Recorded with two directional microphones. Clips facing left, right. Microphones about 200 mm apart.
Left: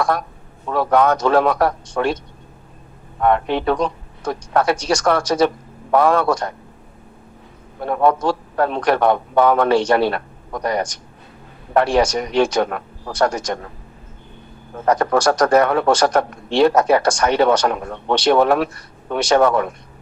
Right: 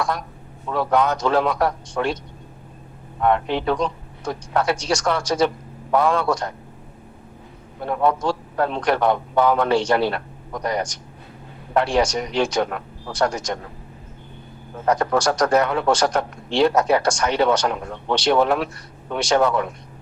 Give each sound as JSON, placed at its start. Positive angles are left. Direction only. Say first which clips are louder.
{"t": 0.7, "sound": "a man's voice", "louder": "left 4 dB", "side_deg": 55}
{"t": 3.2, "sound": "a man's voice", "louder": "left 2 dB", "side_deg": 55}
{"t": 7.8, "sound": "a man's voice", "louder": "left 3 dB", "side_deg": 55}
{"t": 14.8, "sound": "a man's voice", "louder": "left 3 dB", "side_deg": 60}